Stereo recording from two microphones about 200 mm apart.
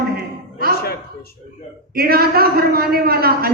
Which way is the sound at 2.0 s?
50° right (ahead or behind).